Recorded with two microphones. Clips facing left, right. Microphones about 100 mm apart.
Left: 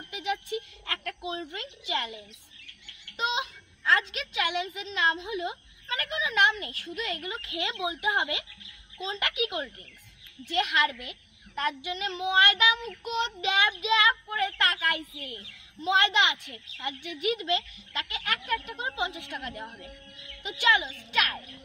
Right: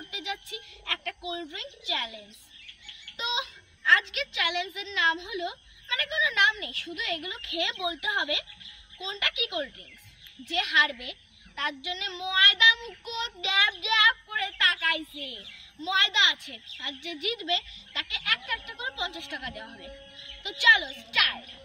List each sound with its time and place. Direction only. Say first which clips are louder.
0.1 s music: left 6 dB; 50° left (ahead or behind)
1.2 s a woman's voice: left 1 dB; 50° left (ahead or behind)
3.8 s a woman's voice: right 1 dB; 40° left (ahead or behind)